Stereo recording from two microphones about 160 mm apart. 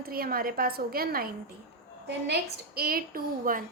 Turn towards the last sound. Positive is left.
turn(degrees=-65)  # may be behind; listen again after turning